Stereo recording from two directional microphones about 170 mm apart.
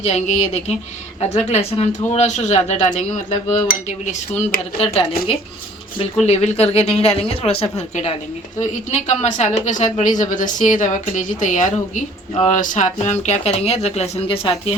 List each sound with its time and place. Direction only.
0.0 s a woman's voice: 40° left (ahead or behind)